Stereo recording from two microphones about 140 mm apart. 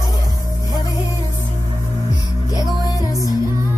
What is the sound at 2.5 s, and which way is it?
Music, 25° left (ahead or behind).